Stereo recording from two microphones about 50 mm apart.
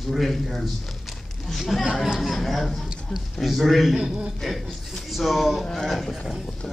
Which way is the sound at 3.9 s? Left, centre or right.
Centre.